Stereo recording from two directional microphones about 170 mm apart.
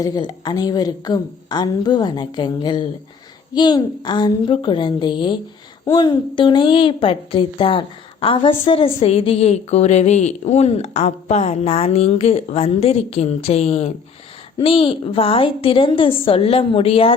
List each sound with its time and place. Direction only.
0.0 s a woman's voice: 25° left (ahead or behind)